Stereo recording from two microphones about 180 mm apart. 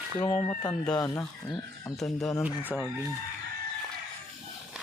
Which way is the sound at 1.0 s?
20° left (ahead or behind).